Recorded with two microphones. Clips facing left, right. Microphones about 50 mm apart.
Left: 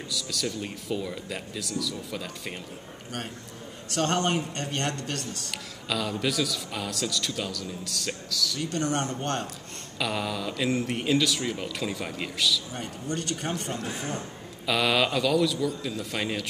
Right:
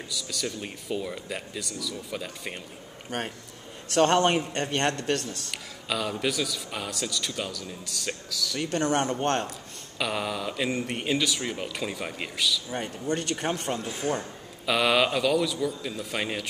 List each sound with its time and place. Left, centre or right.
0.1 s a man's voice: centre
3.9 s a man's voice: right
5.5 s a man's voice: centre
8.5 s a man's voice: right
9.9 s speech: centre
12.7 s a man's voice: right
14.7 s speech: centre